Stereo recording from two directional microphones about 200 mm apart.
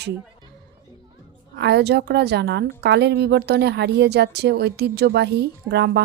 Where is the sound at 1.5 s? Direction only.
55° right (ahead or behind).